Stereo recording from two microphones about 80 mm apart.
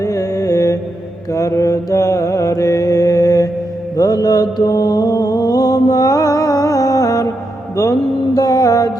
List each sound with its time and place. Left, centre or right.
0.0 s mantra: left
8.4 s mantra: left